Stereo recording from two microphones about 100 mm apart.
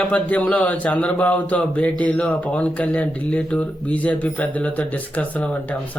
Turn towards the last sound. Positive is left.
turn(degrees=15)  # may be behind; listen again after turning